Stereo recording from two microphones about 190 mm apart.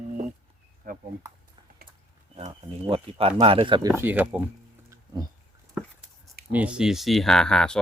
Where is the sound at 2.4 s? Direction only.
30° right (ahead or behind).